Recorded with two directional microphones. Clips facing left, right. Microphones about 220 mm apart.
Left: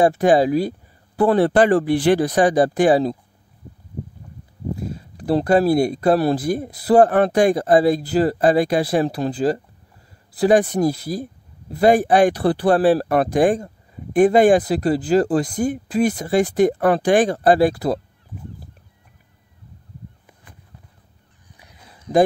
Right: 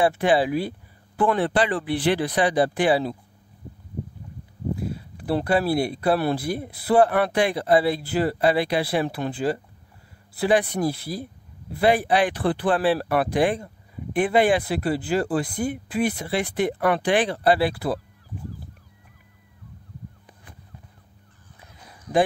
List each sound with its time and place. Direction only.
0.0 s speech: 45° left (ahead or behind)
4.7 s speech: 40° left (ahead or behind)
22.1 s speech: 25° left (ahead or behind)